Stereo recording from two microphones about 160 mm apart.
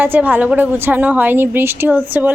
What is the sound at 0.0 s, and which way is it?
A woman's voice, 10° right (ahead or behind).